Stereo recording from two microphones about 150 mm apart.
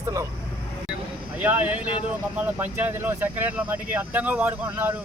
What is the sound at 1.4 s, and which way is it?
Speech, 10° right (ahead or behind).